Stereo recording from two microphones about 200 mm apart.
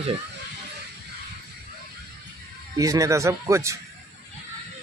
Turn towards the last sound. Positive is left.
turn(degrees=-15)  # may be behind; listen again after turning